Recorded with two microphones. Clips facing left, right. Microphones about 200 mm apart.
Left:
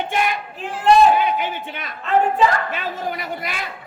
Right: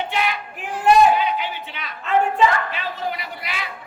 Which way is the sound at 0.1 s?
50° left (ahead or behind).